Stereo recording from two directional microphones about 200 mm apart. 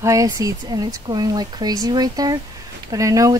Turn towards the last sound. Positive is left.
turn(degrees=-15)  # may be behind; listen again after turning